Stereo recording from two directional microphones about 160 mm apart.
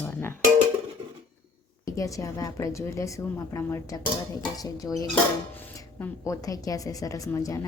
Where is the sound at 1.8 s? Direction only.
20° left (ahead or behind).